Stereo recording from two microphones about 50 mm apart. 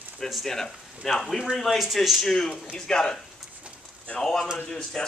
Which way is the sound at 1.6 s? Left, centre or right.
Centre.